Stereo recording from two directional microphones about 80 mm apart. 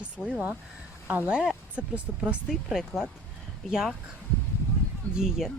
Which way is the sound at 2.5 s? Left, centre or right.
Centre.